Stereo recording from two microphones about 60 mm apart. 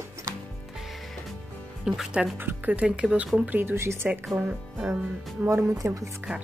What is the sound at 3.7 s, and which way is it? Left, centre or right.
Speech, right.